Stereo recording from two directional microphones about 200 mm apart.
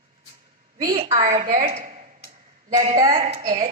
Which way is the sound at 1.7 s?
35° right (ahead or behind).